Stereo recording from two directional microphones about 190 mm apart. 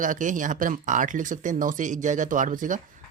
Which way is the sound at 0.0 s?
40° right (ahead or behind).